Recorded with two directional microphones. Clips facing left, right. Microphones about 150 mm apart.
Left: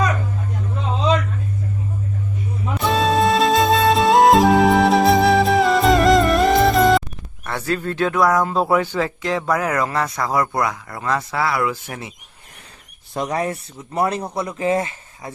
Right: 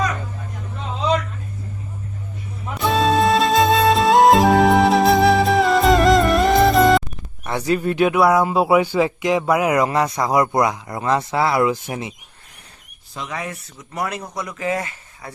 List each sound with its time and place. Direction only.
2.8 s music: centre (ahead or behind)
7.4 s speech: 15° right (ahead or behind)
13.1 s speech: 40° left (ahead or behind); by 15.3 s 25° left (ahead or behind)